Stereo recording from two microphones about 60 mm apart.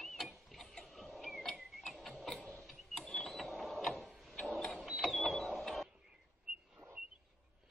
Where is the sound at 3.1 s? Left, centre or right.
Centre.